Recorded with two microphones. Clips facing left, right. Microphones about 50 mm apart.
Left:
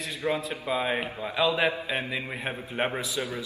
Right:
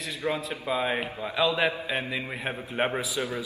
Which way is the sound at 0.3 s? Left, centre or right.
Centre.